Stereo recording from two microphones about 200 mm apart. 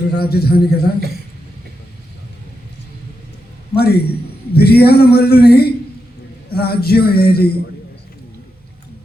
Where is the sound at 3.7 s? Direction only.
50° left (ahead or behind).